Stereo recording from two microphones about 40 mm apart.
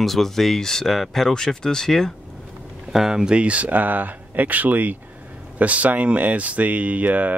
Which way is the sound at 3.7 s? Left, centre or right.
Right.